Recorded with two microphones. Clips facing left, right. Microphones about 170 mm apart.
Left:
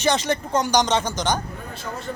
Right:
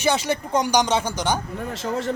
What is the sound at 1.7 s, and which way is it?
Speech, 85° right.